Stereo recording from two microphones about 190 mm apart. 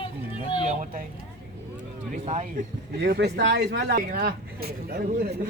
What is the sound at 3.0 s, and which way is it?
Speech, 55° right (ahead or behind).